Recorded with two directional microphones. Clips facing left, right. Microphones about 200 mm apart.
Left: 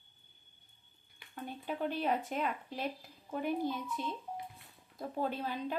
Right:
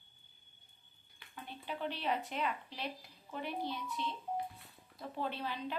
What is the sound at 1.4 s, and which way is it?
A woman's voice, 45° left (ahead or behind).